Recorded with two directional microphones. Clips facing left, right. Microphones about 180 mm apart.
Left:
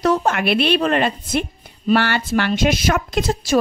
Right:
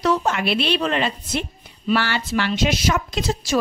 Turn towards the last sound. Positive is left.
turn(degrees=50)  # may be behind; listen again after turning